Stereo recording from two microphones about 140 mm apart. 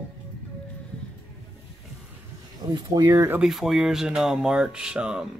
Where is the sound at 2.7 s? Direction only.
30° right (ahead or behind).